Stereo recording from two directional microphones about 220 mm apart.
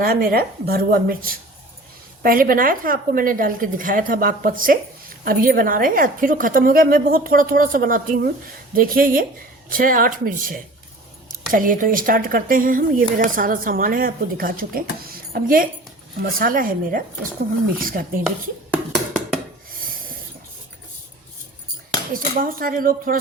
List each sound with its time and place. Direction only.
0.0 s a woman's voice: 40° right (ahead or behind)
18.7 s a sound: centre (ahead or behind)
22.1 s a woman's voice: 40° right (ahead or behind)